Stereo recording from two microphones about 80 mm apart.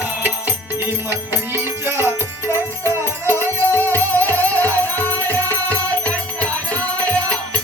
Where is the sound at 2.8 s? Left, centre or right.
Left.